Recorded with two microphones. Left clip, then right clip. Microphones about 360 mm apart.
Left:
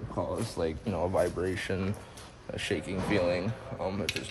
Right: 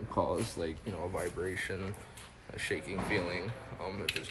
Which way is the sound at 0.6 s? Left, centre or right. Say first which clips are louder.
Left 6 dB; centre.